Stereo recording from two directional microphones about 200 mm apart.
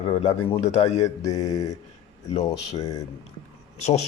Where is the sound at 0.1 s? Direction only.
30° left (ahead or behind).